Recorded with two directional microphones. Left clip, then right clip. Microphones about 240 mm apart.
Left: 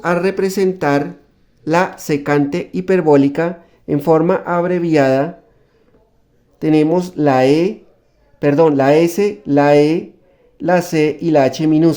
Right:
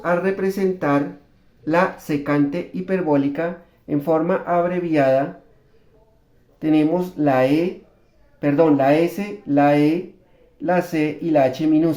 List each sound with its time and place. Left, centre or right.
0.0 s speech: left
6.6 s speech: left